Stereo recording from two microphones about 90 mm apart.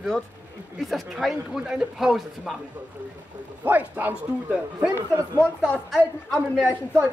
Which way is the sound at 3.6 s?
20° right (ahead or behind).